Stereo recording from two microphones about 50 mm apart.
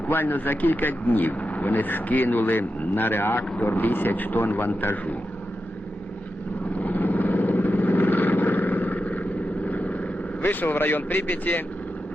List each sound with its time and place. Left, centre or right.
0.1 s speech: left
6.7 s vehicle: left
10.4 s speech: left